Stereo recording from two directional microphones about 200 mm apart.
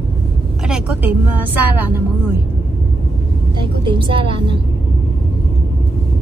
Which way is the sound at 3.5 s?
25° right (ahead or behind).